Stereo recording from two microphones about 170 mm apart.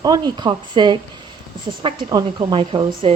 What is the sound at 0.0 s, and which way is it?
A woman's voice, 25° right (ahead or behind).